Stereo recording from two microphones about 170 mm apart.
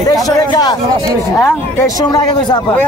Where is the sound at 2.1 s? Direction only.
25° left (ahead or behind).